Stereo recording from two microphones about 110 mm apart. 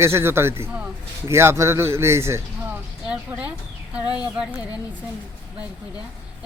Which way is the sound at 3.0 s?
15° right (ahead or behind).